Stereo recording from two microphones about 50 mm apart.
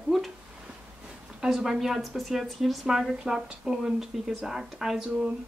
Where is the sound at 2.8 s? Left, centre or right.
Centre.